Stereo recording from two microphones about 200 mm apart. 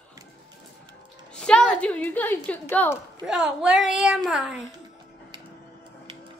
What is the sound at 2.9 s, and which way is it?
Speech, 5° right (ahead or behind).